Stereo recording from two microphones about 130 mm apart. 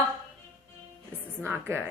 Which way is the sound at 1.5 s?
15° right (ahead or behind).